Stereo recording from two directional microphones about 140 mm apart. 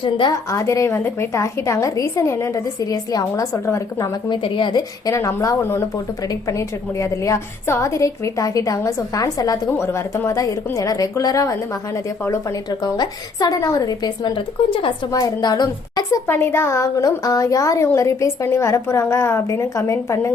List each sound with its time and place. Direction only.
0.0 s a woman's voice: 35° left (ahead or behind)
0.5 s a woman's voice: 20° left (ahead or behind)
4.4 s a woman's voice: 35° left (ahead or behind)
12.8 s a woman's voice: 30° left (ahead or behind)
15.1 s a woman's voice: 25° left (ahead or behind)
16.2 s a woman's voice: 15° left (ahead or behind)